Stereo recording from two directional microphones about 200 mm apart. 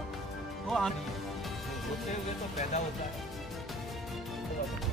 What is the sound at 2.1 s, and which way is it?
Speech, 35° left (ahead or behind).